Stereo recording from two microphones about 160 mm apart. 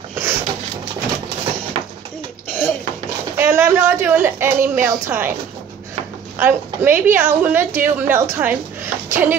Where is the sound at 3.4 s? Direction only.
15° right (ahead or behind).